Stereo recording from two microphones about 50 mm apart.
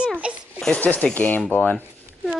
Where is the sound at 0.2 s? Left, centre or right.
Right.